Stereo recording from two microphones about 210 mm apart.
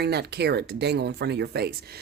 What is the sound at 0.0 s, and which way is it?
Speech, 50° right (ahead or behind).